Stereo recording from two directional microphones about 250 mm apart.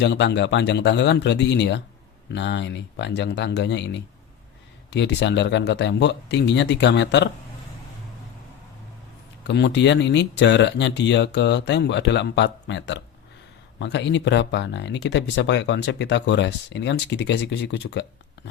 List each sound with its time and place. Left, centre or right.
0.0 s speech: left
4.9 s speech: left
9.5 s speech: left